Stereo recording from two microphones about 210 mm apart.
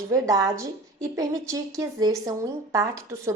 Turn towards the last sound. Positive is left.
turn(degrees=-15)  # may be behind; listen again after turning